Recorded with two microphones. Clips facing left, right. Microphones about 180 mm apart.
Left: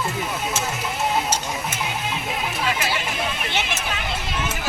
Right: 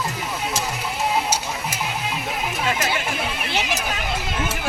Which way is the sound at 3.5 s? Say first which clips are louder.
Right 2 dB; 35° right (ahead or behind).